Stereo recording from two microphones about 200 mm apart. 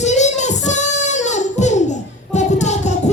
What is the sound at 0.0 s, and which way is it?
Child singing, 35° left (ahead or behind).